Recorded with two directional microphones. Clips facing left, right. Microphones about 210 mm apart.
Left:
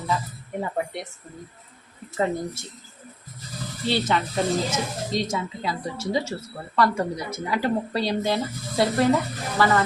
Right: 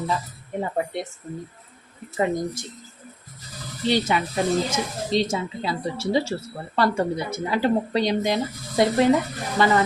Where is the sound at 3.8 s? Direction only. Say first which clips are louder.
Right 2 dB; 10° right (ahead or behind).